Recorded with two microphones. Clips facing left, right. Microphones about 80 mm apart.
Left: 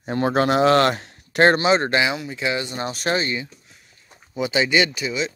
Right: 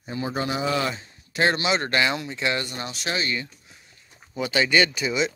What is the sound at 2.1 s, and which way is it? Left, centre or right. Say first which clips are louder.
Speech: left 2 dB; centre.